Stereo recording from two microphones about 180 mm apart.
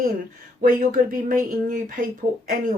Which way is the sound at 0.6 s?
50° right (ahead or behind).